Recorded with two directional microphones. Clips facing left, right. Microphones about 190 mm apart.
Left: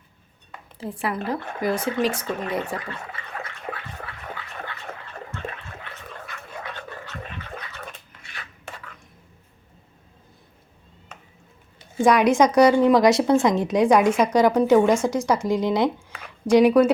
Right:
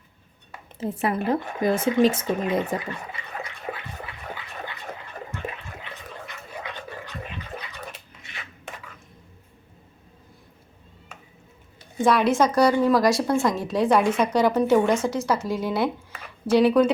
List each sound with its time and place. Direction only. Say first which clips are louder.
0.8 s speech: right 3 dB; 20° right (ahead or behind)
4.6 s a sound: even; 15° right (ahead or behind)
8.2 s rub: even; 20° right (ahead or behind)
12.0 s a woman's voice: left 3 dB; 15° left (ahead or behind)
13.8 s speech: left 2 dB; centre (ahead or behind)
14.3 s speech: left 3 dB; 10° left (ahead or behind)